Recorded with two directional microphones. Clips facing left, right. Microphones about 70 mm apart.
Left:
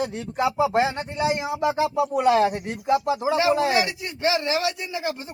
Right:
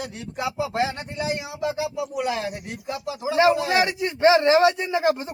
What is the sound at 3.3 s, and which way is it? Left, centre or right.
Speech, right.